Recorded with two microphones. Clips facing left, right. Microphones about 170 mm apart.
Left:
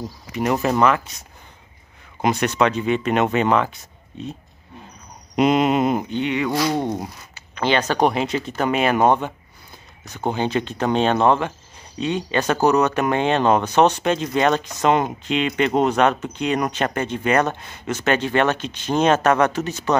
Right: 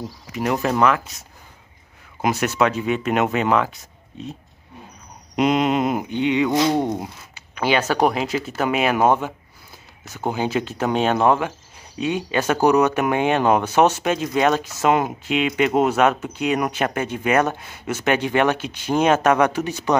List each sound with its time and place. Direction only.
0.3 s speech: centre (ahead or behind)
2.2 s speech: 5° right (ahead or behind)
6.0 s speech: 15° right (ahead or behind)
6.9 s speech: 5° right (ahead or behind)